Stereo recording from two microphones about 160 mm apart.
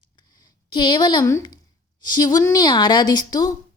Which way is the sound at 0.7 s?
30° left (ahead or behind).